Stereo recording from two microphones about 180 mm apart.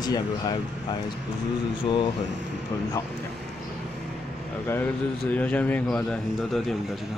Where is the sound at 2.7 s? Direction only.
20° left (ahead or behind).